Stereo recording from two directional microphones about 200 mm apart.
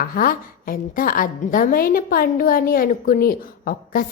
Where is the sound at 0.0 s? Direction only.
45° left (ahead or behind).